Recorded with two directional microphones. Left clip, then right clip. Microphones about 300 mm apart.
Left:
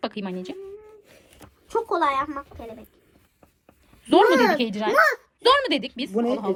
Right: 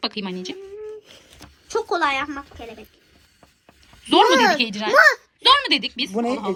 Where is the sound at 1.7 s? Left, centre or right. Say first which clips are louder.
Right 1 dB; centre.